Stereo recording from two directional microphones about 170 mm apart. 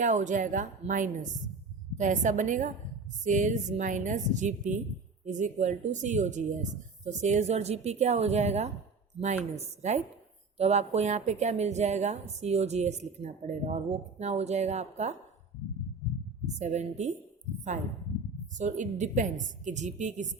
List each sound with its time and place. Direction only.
0.0 s a woman's voice: 45° right (ahead or behind)
16.6 s speech: 40° right (ahead or behind)
18.5 s speech: 45° right (ahead or behind)